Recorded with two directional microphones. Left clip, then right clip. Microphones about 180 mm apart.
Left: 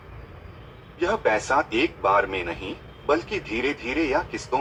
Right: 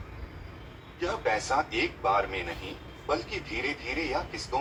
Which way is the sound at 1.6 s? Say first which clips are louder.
Left 6 dB; 10° left (ahead or behind).